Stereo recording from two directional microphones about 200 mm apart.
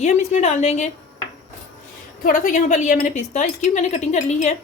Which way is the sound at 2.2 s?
40° left (ahead or behind).